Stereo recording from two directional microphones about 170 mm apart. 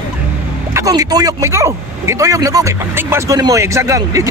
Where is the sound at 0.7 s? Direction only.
20° right (ahead or behind).